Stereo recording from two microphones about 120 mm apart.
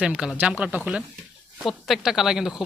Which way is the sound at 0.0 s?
5° right (ahead or behind).